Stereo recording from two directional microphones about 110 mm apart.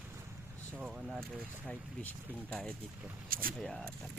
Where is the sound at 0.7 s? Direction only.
15° right (ahead or behind).